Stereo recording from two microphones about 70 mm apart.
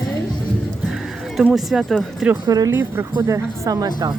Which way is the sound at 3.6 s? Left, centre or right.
Right.